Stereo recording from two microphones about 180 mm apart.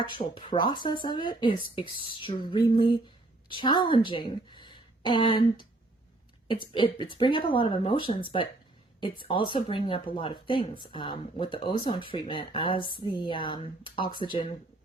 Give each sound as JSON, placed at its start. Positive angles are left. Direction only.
{"t": 0.0, "sound": "a woman's voice", "side_deg": 25}